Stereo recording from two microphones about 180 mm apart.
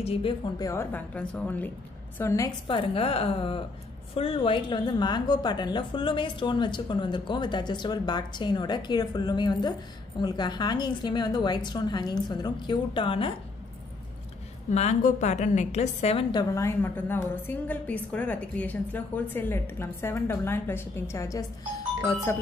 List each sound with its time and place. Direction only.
0.0 s a woman's voice: 30° left (ahead or behind)
0.7 s a woman's voice: 10° left (ahead or behind)
2.7 s a woman's voice: 30° left (ahead or behind)
14.7 s a woman's voice: 40° left (ahead or behind); by 22.4 s 15° left (ahead or behind)